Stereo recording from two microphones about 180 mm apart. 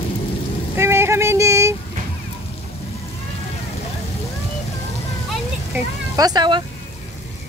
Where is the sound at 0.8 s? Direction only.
15° right (ahead or behind).